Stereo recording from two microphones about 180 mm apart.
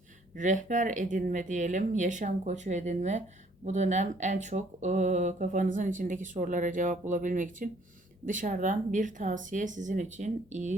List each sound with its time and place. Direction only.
0.3 s speech: 45° right (ahead or behind)